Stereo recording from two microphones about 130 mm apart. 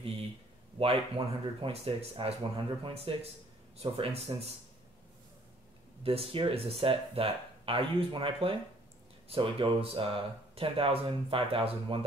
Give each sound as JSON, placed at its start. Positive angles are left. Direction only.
{"t": 0.7, "sound": "speech", "side_deg": -45}
{"t": 6.0, "sound": "speech", "side_deg": -45}